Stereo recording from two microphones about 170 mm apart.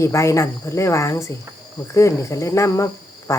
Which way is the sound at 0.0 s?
15° left (ahead or behind).